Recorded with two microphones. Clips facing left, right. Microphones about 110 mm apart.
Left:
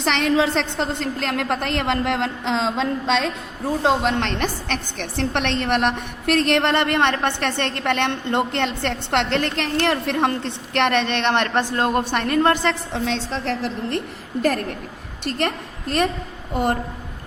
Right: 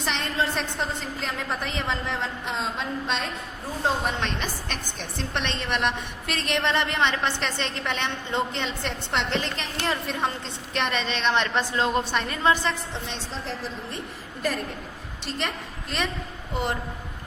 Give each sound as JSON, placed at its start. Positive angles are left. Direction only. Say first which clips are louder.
{"t": 0.0, "sound": "a woman's voice", "louder": "left 8 dB", "side_deg": 75}
{"t": 3.8, "sound": "a woman's voice", "louder": "left 6 dB", "side_deg": 70}
{"t": 15.2, "sound": "a woman's voice", "louder": "left 7 dB", "side_deg": 55}